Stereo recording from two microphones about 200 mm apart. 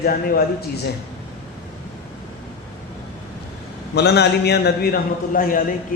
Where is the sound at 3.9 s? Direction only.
55° left (ahead or behind).